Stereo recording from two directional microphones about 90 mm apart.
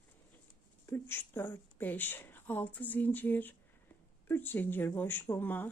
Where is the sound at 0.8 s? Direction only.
20° left (ahead or behind).